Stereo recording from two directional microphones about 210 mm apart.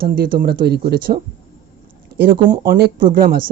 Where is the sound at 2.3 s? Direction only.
20° right (ahead or behind).